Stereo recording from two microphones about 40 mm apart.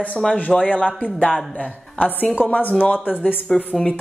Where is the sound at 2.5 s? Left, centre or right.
Left.